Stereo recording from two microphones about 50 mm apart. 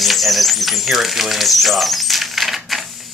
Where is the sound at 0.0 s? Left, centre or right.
Centre.